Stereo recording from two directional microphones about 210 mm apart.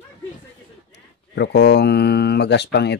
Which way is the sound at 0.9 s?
55° left (ahead or behind).